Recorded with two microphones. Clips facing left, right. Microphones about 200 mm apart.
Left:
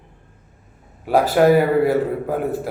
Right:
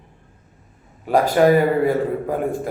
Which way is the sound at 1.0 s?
5° left (ahead or behind).